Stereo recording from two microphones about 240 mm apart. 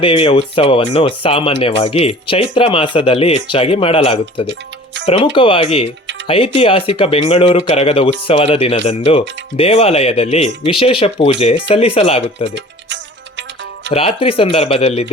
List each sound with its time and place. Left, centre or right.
0.0 s speech: left
12.5 s music: right
13.9 s speech: left